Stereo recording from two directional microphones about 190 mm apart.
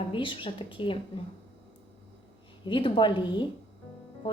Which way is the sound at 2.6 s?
25° left (ahead or behind).